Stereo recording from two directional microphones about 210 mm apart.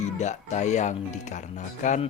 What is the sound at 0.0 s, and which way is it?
Speech, 35° left (ahead or behind).